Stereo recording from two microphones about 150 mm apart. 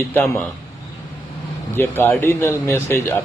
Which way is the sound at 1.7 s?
15° left (ahead or behind).